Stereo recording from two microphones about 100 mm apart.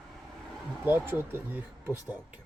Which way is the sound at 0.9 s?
20° right (ahead or behind).